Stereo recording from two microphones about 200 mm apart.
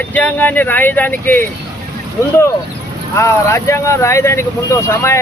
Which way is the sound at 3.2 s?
15° left (ahead or behind).